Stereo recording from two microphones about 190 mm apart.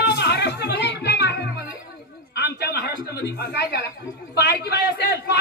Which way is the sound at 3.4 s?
60° left (ahead or behind).